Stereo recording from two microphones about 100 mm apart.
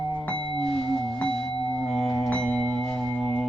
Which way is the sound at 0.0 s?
5° left (ahead or behind).